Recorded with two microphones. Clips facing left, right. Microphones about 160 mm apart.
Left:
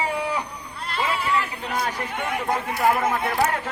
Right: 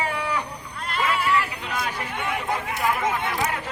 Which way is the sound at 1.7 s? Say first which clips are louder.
Left 3 dB; 45° left (ahead or behind).